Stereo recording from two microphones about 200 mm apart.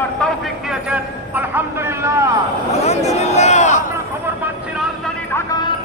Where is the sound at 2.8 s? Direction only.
35° left (ahead or behind).